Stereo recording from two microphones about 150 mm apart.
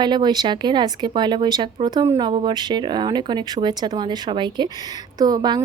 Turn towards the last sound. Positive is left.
turn(degrees=-25)  # may be behind; listen again after turning